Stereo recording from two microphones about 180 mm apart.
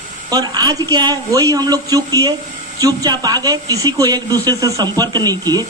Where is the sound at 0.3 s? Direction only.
20° right (ahead or behind).